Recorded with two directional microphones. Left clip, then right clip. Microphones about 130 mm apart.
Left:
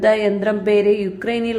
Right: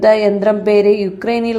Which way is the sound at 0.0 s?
20° right (ahead or behind).